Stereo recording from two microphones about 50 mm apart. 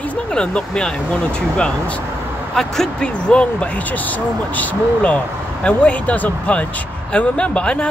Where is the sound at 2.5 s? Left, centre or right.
Centre.